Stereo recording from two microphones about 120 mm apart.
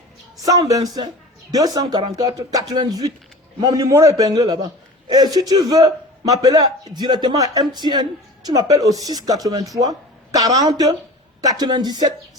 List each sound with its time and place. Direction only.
0.4 s a man's voice: 30° right (ahead or behind)